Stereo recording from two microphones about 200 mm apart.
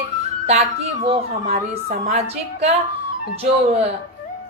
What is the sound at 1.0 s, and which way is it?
Speech, 30° right (ahead or behind).